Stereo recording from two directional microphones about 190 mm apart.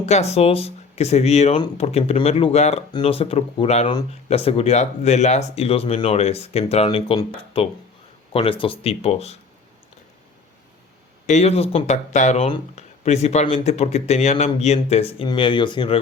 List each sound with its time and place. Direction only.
0.0 s speech: 35° left (ahead or behind)
11.3 s speech: 35° left (ahead or behind)